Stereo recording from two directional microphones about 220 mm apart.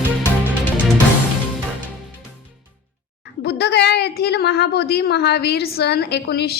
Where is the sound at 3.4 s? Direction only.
50° left (ahead or behind).